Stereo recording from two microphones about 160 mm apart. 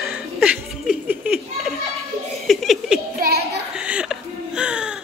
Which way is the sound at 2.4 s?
Centre (ahead or behind).